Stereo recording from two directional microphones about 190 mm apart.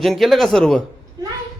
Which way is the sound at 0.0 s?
Centre (ahead or behind).